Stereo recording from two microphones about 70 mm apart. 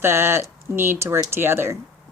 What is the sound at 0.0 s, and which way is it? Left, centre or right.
Speech, right.